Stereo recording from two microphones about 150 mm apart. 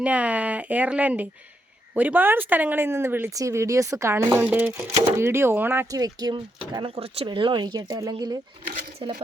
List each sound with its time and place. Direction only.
0.0 s speech: 10° right (ahead or behind)
6.0 s speech: 25° right (ahead or behind)
6.7 s speech: 40° right (ahead or behind)